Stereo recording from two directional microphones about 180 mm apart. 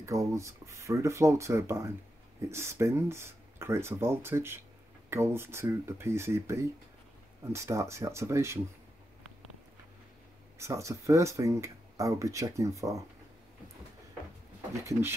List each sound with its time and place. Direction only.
0.0 s speech: 15° right (ahead or behind)
10.6 s speech: 15° right (ahead or behind)
14.7 s speech: 15° right (ahead or behind)